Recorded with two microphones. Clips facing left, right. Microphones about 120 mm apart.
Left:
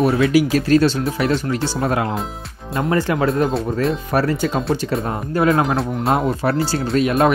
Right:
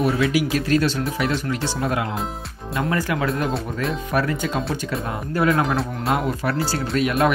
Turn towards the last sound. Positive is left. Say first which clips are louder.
# left 4 dB
turn(degrees=30)  # may be behind; listen again after turning